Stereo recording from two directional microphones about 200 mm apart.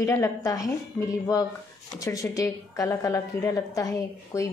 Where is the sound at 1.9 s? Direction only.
15° left (ahead or behind).